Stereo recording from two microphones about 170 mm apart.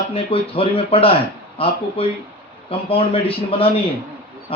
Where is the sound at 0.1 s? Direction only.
35° left (ahead or behind).